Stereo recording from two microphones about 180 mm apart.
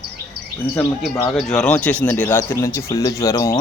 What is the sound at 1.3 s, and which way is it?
Speech, 5° left (ahead or behind).